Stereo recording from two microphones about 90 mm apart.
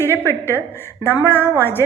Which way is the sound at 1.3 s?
25° left (ahead or behind).